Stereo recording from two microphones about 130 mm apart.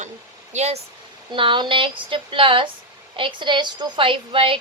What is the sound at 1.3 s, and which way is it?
A child's voice, 40° right (ahead or behind).